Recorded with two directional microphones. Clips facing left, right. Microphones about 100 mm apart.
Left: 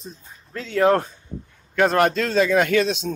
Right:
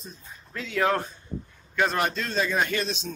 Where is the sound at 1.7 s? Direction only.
65° left (ahead or behind).